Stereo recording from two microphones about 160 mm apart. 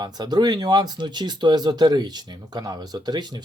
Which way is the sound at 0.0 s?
25° right (ahead or behind).